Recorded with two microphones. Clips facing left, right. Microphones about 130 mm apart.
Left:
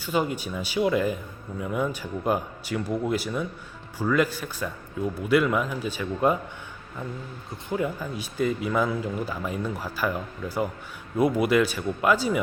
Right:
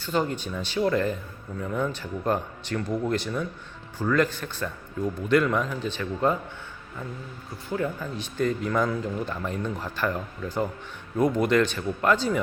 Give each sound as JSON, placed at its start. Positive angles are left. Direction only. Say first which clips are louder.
{"t": 0.0, "sound": "speech", "louder": "even", "side_deg": 10}
{"t": 7.7, "sound": "speech", "louder": "left 1 dB", "side_deg": 10}